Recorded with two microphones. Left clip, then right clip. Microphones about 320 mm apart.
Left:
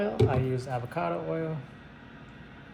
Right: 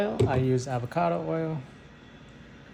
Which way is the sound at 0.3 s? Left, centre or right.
Right.